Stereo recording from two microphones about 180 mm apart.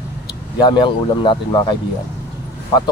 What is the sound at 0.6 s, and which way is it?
Speech, 25° left (ahead or behind).